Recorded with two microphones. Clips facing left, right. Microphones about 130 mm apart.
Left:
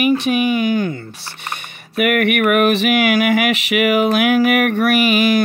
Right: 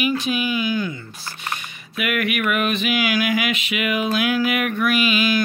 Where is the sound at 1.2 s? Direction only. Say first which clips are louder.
Left 1 dB; 60° left (ahead or behind).